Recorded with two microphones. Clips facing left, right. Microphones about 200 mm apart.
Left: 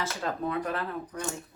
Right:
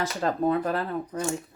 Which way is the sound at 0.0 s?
35° right (ahead or behind).